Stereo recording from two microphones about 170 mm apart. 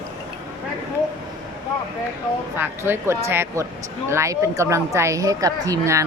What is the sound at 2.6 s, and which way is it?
A woman's voice, 15° right (ahead or behind).